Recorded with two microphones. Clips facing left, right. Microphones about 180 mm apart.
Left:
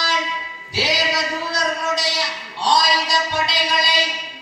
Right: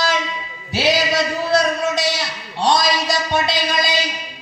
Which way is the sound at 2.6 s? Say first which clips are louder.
Right 2 dB; 50° right (ahead or behind).